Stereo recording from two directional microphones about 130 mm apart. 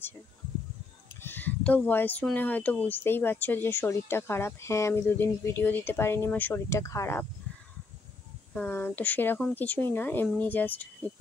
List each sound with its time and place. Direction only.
1.2 s speech: 15° left (ahead or behind)
8.5 s speech: 15° left (ahead or behind)